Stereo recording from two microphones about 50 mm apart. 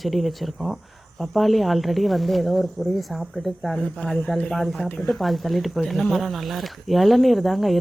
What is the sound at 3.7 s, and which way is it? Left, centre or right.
Speech, centre.